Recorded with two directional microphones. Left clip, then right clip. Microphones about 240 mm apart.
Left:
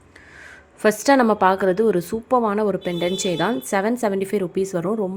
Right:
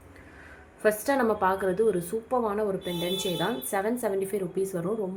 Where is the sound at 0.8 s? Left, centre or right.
Left.